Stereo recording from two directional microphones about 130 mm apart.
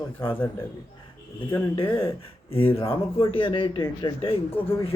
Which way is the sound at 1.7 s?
40° left (ahead or behind).